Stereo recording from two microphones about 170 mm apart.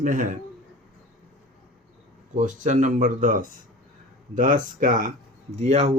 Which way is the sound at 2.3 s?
50° right (ahead or behind).